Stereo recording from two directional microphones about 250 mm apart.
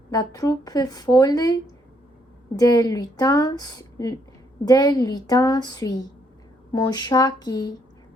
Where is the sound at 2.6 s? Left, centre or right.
Centre.